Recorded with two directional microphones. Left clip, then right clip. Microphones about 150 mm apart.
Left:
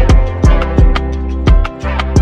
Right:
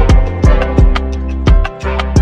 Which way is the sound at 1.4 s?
Centre (ahead or behind).